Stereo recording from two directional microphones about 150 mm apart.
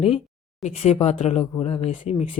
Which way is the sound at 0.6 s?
45° left (ahead or behind).